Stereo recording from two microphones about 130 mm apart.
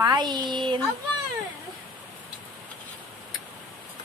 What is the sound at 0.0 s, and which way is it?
Speech, 35° right (ahead or behind).